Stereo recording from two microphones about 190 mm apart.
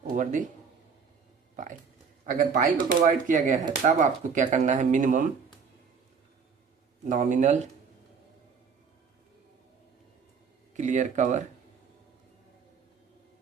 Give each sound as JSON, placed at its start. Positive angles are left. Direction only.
{"t": 0.2, "sound": "speech", "side_deg": -40}
{"t": 2.2, "sound": "a man's voice", "side_deg": -45}
{"t": 7.1, "sound": "speech", "side_deg": -45}
{"t": 10.8, "sound": "speech", "side_deg": -40}